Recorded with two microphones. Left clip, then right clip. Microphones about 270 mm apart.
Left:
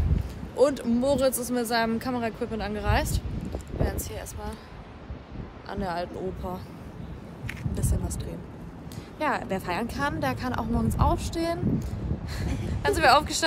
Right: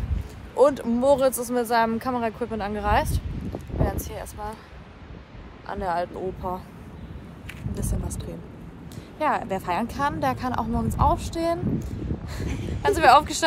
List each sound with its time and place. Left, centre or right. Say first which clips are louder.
0.6 s speech: right 3 dB; centre
5.7 s speech: right 5 dB; right
7.8 s speech: right 1 dB; centre